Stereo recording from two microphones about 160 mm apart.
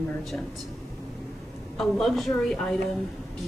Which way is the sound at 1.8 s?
Centre (ahead or behind).